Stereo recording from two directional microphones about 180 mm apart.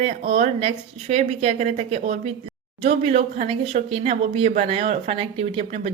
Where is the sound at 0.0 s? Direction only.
40° right (ahead or behind).